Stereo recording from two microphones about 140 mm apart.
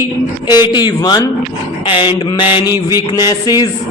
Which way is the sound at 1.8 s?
35° left (ahead or behind).